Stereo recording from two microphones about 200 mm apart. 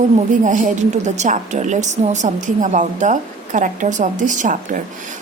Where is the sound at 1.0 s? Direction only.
35° right (ahead or behind).